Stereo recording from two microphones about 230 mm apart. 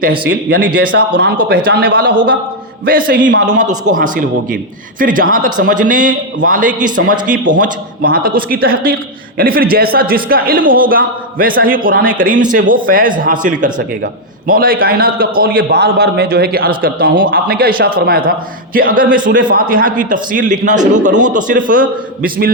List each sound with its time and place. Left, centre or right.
0.3 s a man's voice: right
3.3 s a man's voice: right